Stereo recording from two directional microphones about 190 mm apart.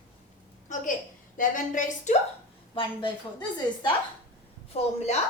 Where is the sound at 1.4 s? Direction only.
45° left (ahead or behind).